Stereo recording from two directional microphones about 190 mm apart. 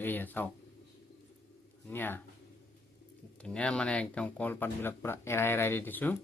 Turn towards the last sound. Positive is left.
turn(degrees=10)  # may be behind; listen again after turning